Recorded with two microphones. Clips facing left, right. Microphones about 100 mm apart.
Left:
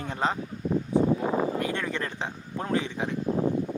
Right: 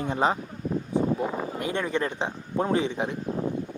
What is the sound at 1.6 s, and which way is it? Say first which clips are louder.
Speech: right 3 dB; 20° right (ahead or behind).